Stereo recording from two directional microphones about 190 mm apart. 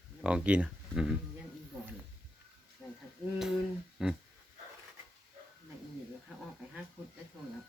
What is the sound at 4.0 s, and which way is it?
Speech, 5° right (ahead or behind).